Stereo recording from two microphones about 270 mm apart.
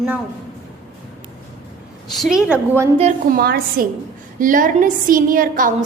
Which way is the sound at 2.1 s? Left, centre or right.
Centre.